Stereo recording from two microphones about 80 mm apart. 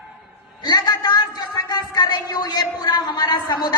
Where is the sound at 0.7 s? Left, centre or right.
Left.